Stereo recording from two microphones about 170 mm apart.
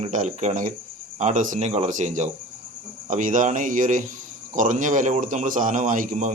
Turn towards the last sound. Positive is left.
turn(degrees=-45)  # may be behind; listen again after turning